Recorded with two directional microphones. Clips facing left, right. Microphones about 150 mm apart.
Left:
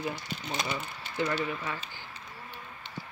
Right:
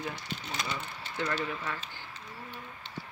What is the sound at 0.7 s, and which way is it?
Speech, 5° left (ahead or behind).